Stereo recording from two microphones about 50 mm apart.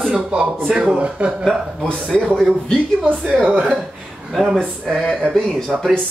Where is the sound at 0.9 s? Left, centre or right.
Right.